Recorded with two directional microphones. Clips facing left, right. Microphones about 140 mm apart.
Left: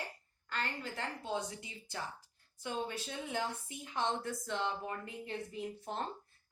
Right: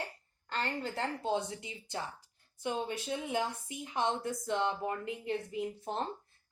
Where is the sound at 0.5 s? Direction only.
30° right (ahead or behind).